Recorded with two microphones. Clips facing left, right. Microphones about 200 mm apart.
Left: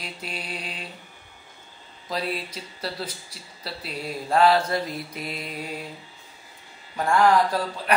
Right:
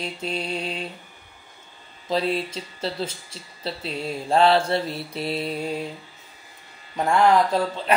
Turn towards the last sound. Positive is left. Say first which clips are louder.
# right 3 dB
turn(degrees=-25)  # may be behind; listen again after turning